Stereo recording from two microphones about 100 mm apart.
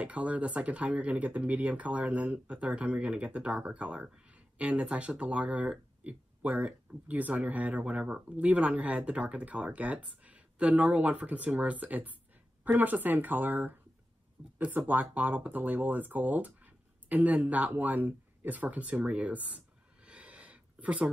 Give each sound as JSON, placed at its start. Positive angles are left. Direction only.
{"t": 0.0, "sound": "speech", "side_deg": -15}